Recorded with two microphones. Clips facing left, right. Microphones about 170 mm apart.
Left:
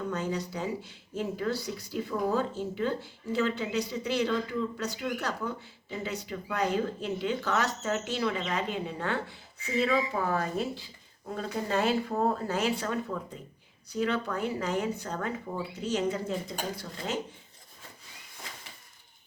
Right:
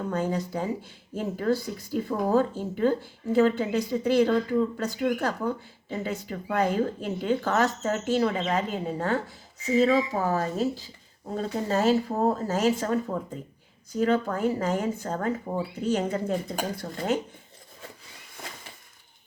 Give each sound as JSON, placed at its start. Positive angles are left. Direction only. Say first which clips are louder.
{"t": 0.1, "sound": "speech", "louder": "right 4 dB", "side_deg": -50}